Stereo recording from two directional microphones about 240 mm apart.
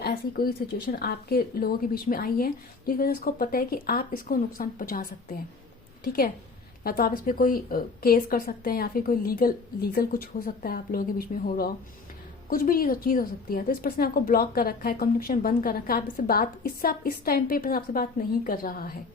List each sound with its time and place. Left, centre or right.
0.0 s a woman's voice: left
6.8 s a woman's voice: left